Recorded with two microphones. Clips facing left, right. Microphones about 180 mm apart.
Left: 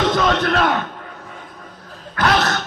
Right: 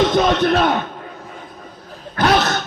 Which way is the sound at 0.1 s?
20° right (ahead or behind).